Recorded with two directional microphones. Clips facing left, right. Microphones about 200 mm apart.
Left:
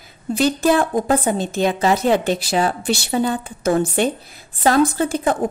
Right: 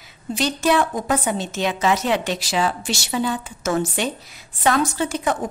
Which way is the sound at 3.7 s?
50° left (ahead or behind).